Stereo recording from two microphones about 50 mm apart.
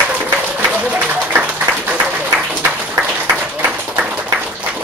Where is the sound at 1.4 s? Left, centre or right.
Right.